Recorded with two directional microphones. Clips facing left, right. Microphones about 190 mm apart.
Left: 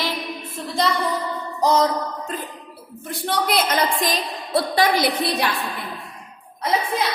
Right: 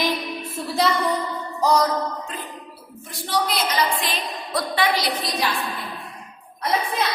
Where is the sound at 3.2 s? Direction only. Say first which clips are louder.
Left 2 dB; 55° left (ahead or behind).